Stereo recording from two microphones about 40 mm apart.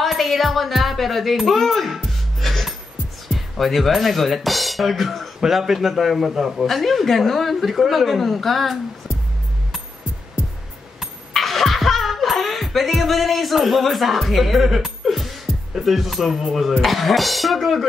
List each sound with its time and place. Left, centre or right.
0.0 s music: centre
3.3 s speech: centre
11.0 s a sound: centre
16.8 s speech: centre